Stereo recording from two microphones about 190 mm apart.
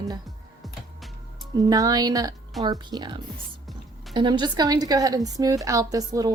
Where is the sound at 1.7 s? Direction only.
20° right (ahead or behind).